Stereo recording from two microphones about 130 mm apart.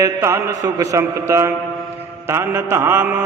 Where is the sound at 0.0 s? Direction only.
20° right (ahead or behind).